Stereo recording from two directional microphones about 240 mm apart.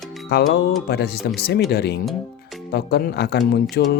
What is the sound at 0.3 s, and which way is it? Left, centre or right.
Speech, left.